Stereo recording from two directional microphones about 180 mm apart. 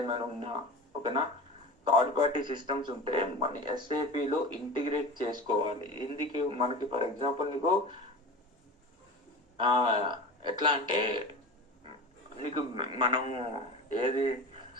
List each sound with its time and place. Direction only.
0.0 s a man's voice: 25° right (ahead or behind)
1.9 s a man's voice: 25° right (ahead or behind)
9.6 s a man's voice: 25° right (ahead or behind)
12.4 s a man's voice: 25° right (ahead or behind)